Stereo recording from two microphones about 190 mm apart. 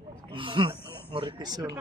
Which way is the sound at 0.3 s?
25° right (ahead or behind).